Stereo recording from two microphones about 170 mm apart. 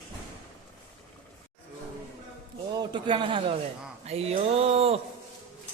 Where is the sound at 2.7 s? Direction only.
25° right (ahead or behind).